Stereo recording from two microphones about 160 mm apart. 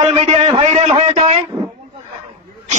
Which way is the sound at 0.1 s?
40° right (ahead or behind).